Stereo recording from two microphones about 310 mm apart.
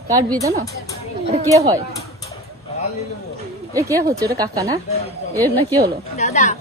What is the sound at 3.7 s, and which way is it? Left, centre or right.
A woman's voice, centre.